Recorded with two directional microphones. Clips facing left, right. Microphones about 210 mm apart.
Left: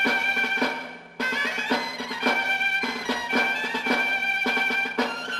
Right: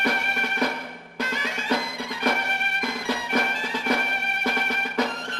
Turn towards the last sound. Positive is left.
turn(degrees=-15)  # may be behind; listen again after turning